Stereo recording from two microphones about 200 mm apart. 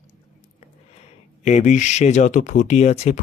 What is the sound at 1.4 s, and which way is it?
Speech, 35° left (ahead or behind).